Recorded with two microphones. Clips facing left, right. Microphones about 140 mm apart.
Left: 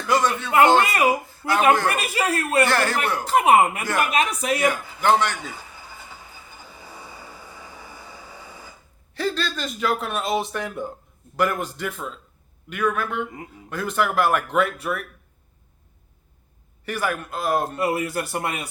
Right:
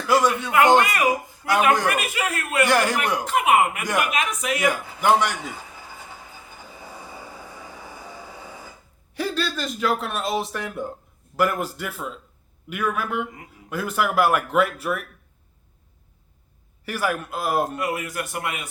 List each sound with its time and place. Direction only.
0.1 s speech: 10° right (ahead or behind)
2.0 s a man's voice: 35° left (ahead or behind)
2.6 s speech: 15° right (ahead or behind)
3.2 s a man's voice: 35° left (ahead or behind)
3.8 s speech: 15° right (ahead or behind)
4.1 s a man's voice: 35° left (ahead or behind)
4.6 s speech: 10° right (ahead or behind)
9.1 s speech: 10° right (ahead or behind)
16.8 s speech: 5° right (ahead or behind)
17.7 s a man's voice: 30° left (ahead or behind)